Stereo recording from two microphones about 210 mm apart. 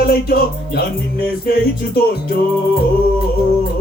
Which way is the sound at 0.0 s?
45° left (ahead or behind).